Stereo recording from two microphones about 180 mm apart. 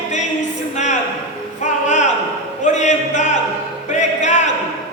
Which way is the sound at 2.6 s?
40° left (ahead or behind).